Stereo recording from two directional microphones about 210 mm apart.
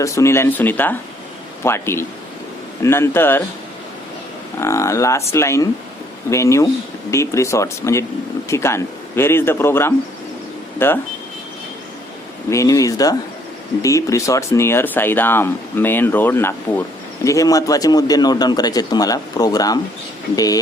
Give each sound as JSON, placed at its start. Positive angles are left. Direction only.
{"t": 0.0, "sound": "speech", "side_deg": 15}
{"t": 4.6, "sound": "speech", "side_deg": 15}
{"t": 12.5, "sound": "speech", "side_deg": 15}